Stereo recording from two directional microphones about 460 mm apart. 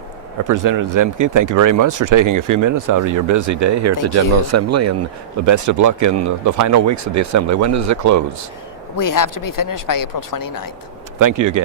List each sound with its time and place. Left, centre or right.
0.4 s speech: right
9.0 s speech: left
11.2 s speech: right